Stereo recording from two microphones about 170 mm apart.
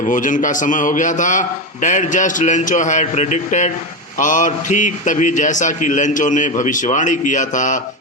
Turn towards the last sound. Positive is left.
turn(degrees=50)  # may be behind; listen again after turning